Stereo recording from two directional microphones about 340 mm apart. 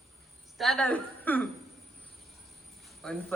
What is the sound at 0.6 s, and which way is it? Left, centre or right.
Speech, centre.